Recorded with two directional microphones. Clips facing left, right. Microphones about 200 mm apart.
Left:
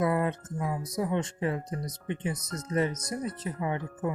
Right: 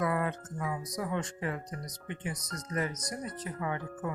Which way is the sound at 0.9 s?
25° left (ahead or behind).